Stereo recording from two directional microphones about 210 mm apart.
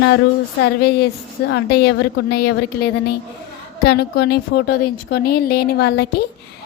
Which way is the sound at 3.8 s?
50° left (ahead or behind).